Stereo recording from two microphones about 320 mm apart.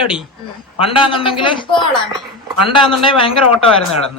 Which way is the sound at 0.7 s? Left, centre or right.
Centre.